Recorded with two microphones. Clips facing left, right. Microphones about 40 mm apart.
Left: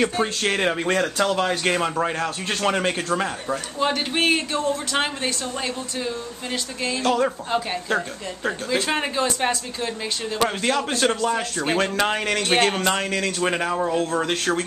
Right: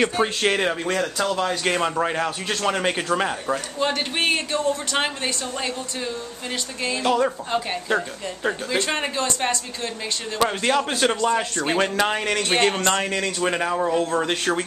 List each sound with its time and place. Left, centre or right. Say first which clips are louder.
0.0 s speech: right 1 dB; centre
0.8 s speech: left 2 dB; centre
1.6 s speech: even; centre
2.5 s speech: left 2 dB; centre
2.8 s speech: right 1 dB; centre
3.8 s speech: left 2 dB; centre
7.2 s speech: even; centre
10.4 s speech: right 2 dB; centre